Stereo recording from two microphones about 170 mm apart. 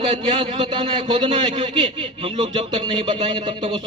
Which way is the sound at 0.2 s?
25° right (ahead or behind).